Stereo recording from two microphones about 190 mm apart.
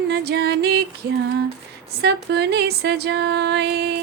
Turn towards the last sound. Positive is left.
turn(degrees=-60)  # may be behind; listen again after turning